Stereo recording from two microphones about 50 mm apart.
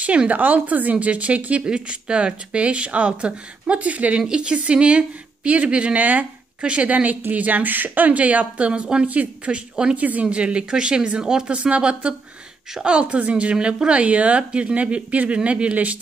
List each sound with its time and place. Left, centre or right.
0.0 s speech: right
4.3 s speech: centre
9.1 s speech: right
10.2 s speech: right